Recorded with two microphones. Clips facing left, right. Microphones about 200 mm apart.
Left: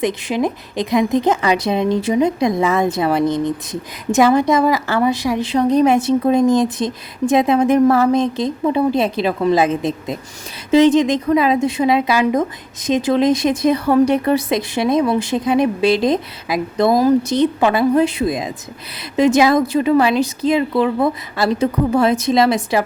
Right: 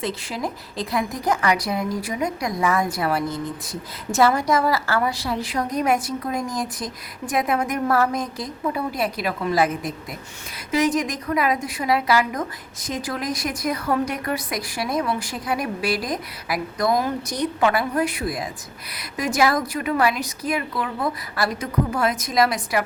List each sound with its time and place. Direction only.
0.0 s a woman's voice: 20° left (ahead or behind)